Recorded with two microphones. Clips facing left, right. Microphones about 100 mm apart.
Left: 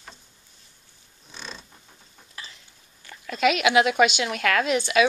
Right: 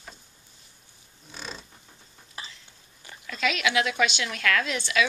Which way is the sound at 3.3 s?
20° left (ahead or behind).